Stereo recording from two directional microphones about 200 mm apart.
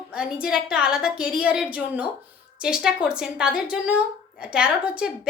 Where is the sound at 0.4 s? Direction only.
5° right (ahead or behind).